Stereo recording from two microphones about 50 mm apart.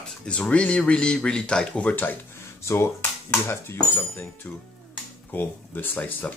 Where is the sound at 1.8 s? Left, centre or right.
Left.